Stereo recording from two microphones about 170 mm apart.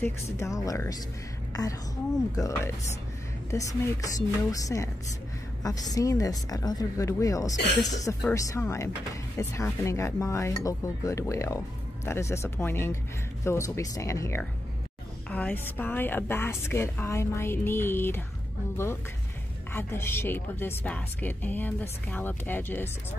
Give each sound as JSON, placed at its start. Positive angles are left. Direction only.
{"t": 0.0, "sound": "a woman's voice", "side_deg": 15}
{"t": 19.7, "sound": "speech", "side_deg": 15}